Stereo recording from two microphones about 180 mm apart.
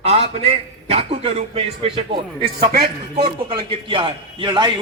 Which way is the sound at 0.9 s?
35° right (ahead or behind).